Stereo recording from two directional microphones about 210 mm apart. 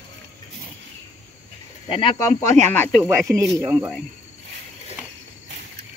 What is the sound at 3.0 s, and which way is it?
Speech, 10° right (ahead or behind).